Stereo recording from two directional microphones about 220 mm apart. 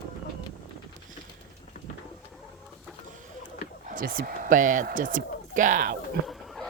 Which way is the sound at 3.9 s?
40° right (ahead or behind).